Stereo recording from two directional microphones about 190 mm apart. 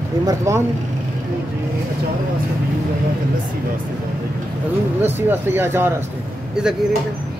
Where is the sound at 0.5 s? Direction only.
15° right (ahead or behind).